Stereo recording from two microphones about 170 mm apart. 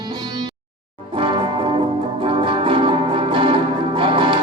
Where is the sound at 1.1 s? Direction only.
30° right (ahead or behind).